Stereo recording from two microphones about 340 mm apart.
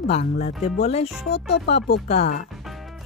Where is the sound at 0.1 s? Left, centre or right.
Centre.